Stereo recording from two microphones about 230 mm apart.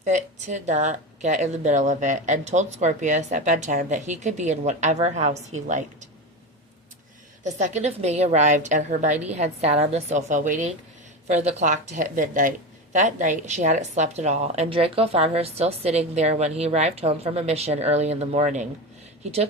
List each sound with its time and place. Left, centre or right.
0.0 s speech: right
7.4 s speech: right